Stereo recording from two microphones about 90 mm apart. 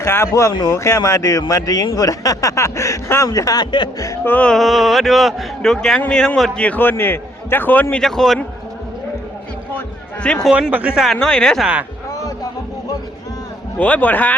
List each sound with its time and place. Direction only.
0.0 s a man's voice: 30° left (ahead or behind)
4.2 s a man's voice: 20° left (ahead or behind)
4.4 s a man's voice: centre (ahead or behind)
6.7 s a man's voice: 20° left (ahead or behind)
8.0 s speech: 5° left (ahead or behind)
10.2 s a man's voice: 10° left (ahead or behind)
10.5 s speech: 15° right (ahead or behind)
10.9 s speech: 5° right (ahead or behind)
11.2 s a man's voice: 10° left (ahead or behind)
11.6 s speech: 15° right (ahead or behind)
13.7 s a man's voice: 20° left (ahead or behind)